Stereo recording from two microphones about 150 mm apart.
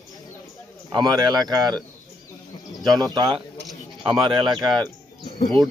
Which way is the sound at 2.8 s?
25° right (ahead or behind).